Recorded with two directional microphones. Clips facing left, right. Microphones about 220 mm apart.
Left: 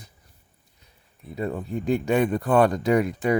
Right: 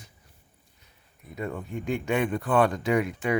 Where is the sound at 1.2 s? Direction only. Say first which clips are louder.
Left 5 dB; 30° left (ahead or behind).